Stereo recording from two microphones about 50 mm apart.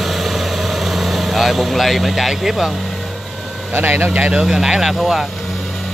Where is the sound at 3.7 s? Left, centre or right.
Right.